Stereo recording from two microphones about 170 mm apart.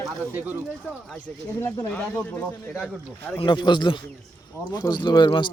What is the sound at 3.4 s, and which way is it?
Speech, 25° left (ahead or behind).